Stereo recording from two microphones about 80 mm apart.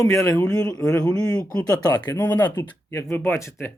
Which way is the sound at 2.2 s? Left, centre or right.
Left.